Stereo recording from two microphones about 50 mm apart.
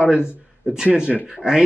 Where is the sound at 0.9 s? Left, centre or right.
Right.